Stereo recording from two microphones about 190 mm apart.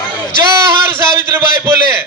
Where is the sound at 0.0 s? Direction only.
25° left (ahead or behind).